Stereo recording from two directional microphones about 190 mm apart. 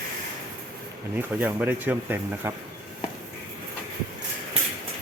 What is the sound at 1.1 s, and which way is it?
Speech, 10° right (ahead or behind).